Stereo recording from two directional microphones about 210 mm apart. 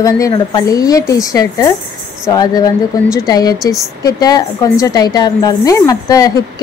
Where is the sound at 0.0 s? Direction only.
20° left (ahead or behind).